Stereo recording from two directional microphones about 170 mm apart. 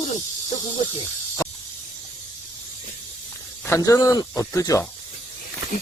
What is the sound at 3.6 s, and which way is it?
Speech, 15° left (ahead or behind).